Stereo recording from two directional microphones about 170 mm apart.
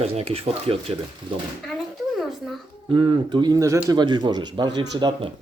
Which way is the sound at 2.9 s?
30° right (ahead or behind).